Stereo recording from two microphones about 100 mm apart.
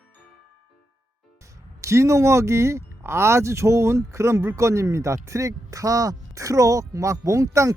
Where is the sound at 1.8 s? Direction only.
30° right (ahead or behind).